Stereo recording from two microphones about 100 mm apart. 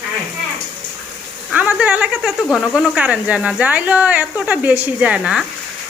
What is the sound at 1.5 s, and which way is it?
A woman's voice, 10° right (ahead or behind).